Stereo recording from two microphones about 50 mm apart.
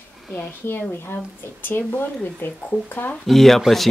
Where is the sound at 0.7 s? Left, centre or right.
Left.